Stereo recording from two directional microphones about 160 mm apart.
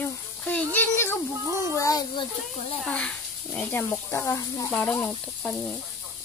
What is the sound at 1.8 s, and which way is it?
Children playing, 20° left (ahead or behind).